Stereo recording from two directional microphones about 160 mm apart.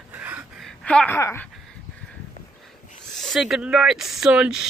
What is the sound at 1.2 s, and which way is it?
Speech, 15° left (ahead or behind).